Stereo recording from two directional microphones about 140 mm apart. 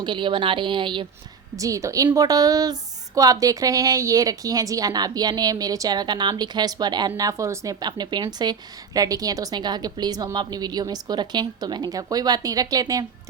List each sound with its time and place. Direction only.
0.0 s a woman's voice: 35° right (ahead or behind)
1.5 s a woman's voice: 25° right (ahead or behind)